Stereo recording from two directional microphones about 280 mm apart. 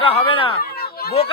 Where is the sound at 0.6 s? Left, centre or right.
Left.